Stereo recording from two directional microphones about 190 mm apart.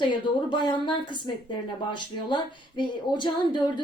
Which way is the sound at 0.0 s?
25° left (ahead or behind).